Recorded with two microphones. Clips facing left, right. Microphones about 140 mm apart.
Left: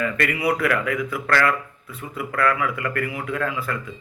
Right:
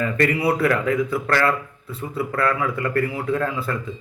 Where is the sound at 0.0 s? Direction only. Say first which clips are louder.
Right 3 dB; 30° right (ahead or behind).